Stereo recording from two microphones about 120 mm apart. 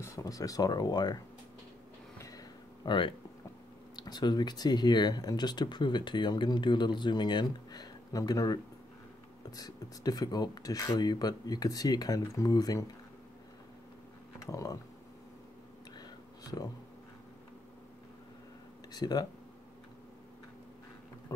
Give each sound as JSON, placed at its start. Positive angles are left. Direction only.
{"t": 0.0, "sound": "speech", "side_deg": 25}
{"t": 2.1, "sound": "a sound", "side_deg": 30}
{"t": 3.9, "sound": "speech", "side_deg": 35}
{"t": 9.6, "sound": "speech", "side_deg": 30}
{"t": 14.4, "sound": "speech", "side_deg": 30}
{"t": 18.9, "sound": "speech", "side_deg": 35}